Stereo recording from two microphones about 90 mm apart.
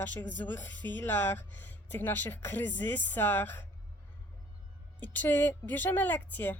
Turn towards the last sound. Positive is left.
turn(degrees=20)  # may be behind; listen again after turning